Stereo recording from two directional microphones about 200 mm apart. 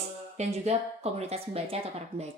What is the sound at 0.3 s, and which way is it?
Speech, 35° right (ahead or behind).